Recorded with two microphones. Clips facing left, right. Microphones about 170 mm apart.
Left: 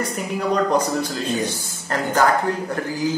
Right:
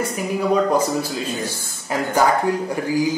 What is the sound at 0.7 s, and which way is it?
Speech, 5° right (ahead or behind).